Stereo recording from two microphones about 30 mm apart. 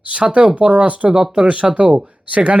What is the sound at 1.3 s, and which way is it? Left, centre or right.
Speech, right.